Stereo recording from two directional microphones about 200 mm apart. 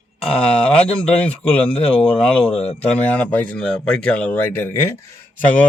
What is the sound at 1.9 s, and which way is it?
Speech, 5° left (ahead or behind).